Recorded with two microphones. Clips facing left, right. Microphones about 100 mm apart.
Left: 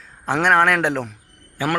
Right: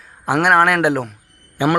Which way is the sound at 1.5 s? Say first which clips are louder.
Right 5 dB; 20° right (ahead or behind).